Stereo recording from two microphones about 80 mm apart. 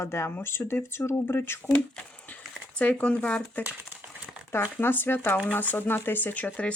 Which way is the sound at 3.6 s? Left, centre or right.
Centre.